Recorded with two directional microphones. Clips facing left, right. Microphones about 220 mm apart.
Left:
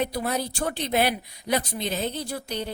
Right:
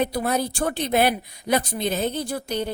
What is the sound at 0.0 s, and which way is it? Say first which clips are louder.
Speech: right 4 dB; 50° right (ahead or behind).